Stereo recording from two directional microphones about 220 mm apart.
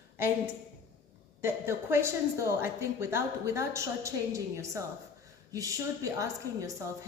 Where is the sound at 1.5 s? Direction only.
10° right (ahead or behind).